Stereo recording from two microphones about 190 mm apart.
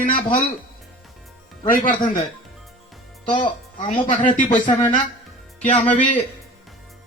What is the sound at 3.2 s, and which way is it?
Speech, 25° left (ahead or behind).